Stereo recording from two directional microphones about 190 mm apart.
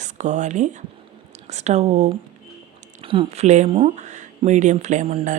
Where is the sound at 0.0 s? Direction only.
40° right (ahead or behind).